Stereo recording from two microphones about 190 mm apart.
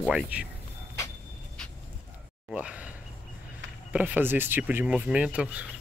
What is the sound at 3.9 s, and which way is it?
Speech, 10° right (ahead or behind).